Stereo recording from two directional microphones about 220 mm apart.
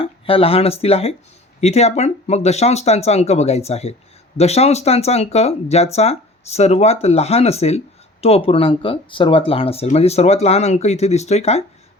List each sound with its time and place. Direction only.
0.0 s speech: 25° left (ahead or behind)